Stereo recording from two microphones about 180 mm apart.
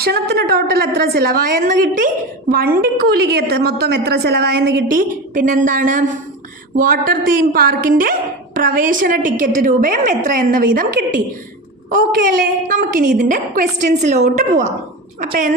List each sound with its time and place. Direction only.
0.0 s a woman's voice: 60° right (ahead or behind)